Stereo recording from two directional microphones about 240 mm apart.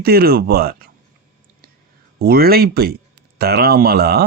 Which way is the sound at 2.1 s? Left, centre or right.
Right.